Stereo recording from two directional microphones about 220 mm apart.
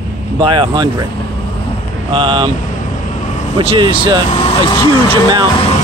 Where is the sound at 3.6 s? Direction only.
20° right (ahead or behind).